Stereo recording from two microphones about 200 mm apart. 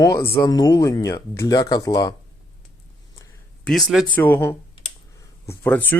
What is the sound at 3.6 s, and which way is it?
Speech, centre (ahead or behind).